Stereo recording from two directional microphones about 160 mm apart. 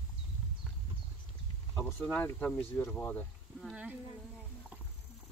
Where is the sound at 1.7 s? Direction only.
10° left (ahead or behind).